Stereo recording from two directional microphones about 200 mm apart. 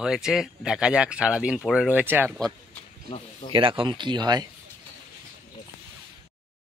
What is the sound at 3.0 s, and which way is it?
Speech, 25° left (ahead or behind).